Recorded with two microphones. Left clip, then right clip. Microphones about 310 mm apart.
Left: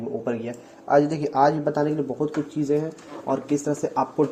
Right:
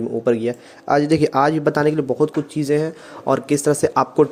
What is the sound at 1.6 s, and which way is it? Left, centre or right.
Speech, right.